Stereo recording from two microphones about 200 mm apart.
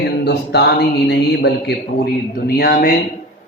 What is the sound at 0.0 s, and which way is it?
Mantra, 55° left (ahead or behind).